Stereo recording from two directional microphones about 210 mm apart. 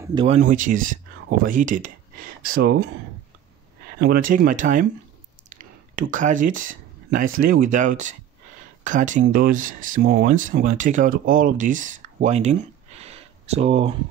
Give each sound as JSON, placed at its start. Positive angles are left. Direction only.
{"t": 0.1, "sound": "speech", "side_deg": -25}
{"t": 0.4, "sound": "speech", "side_deg": -40}
{"t": 2.5, "sound": "speech", "side_deg": -50}
{"t": 4.0, "sound": "speech", "side_deg": -45}
{"t": 5.6, "sound": "a sound", "side_deg": -40}
{"t": 6.6, "sound": "speech", "side_deg": -40}